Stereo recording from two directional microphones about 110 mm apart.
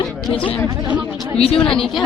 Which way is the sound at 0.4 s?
15° left (ahead or behind).